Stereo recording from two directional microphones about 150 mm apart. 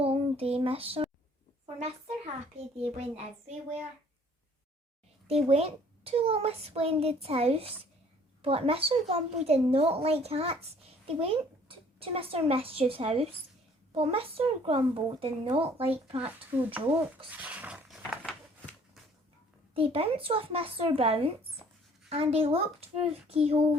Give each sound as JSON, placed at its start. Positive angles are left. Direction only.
{"t": 0.0, "sound": "a woman's voice", "side_deg": -40}
{"t": 5.3, "sound": "a child's voice", "side_deg": -40}
{"t": 15.8, "sound": "speech", "side_deg": -10}
{"t": 17.2, "sound": "a sound", "side_deg": -10}
{"t": 18.2, "sound": "a sound", "side_deg": 10}
{"t": 19.7, "sound": "a child's voice", "side_deg": -40}